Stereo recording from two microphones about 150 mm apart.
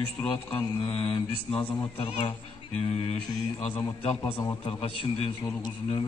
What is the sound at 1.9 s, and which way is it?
Speech, 40° left (ahead or behind).